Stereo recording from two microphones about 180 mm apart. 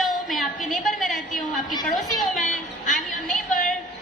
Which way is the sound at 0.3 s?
Centre (ahead or behind).